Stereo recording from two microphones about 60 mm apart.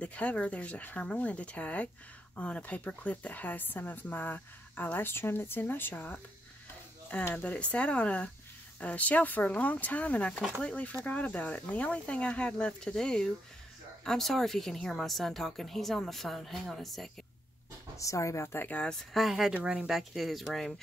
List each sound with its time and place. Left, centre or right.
0.0 s speech: left
5.9 s speech: left
7.3 s speech: left; by 17.1 s centre
17.9 s speech: left
18.9 s speech: centre
19.5 s speech: centre
19.9 s speech: centre